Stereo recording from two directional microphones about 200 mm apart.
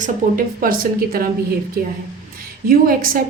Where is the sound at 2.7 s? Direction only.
45° right (ahead or behind).